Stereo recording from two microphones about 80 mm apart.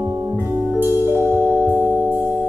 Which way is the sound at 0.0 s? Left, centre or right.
Right.